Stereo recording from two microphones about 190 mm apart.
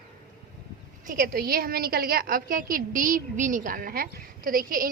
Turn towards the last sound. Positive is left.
turn(degrees=-50)  # may be behind; listen again after turning